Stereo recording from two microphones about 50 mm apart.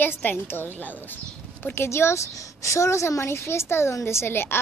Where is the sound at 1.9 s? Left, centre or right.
Left.